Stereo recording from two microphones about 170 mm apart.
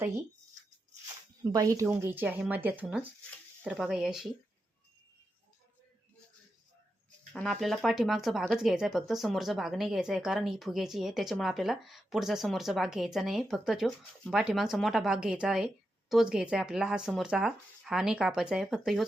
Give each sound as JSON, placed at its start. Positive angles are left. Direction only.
{"t": 1.5, "sound": "speech", "side_deg": -20}
{"t": 7.3, "sound": "speech", "side_deg": 0}